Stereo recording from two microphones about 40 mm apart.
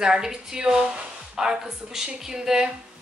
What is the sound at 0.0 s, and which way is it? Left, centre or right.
Speech, centre.